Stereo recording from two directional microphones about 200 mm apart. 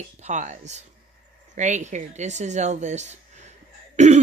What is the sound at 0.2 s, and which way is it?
Speech, 35° right (ahead or behind).